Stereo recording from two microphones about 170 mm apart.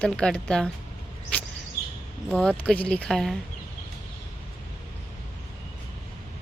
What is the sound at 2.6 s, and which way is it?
Speech, 5° left (ahead or behind).